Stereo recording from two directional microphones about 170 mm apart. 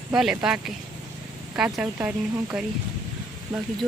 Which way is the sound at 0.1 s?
5° right (ahead or behind).